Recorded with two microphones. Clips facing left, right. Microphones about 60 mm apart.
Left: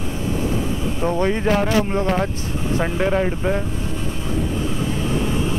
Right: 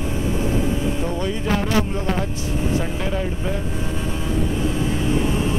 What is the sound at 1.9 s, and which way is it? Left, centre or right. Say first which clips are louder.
Speech: left 4 dB; left.